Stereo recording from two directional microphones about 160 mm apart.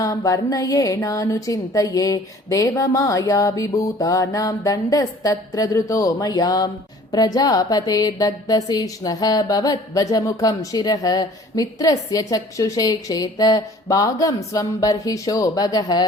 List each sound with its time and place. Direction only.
0.0 s music: 20° left (ahead or behind)